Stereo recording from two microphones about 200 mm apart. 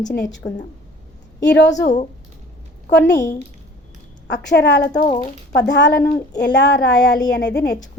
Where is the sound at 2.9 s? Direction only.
60° left (ahead or behind).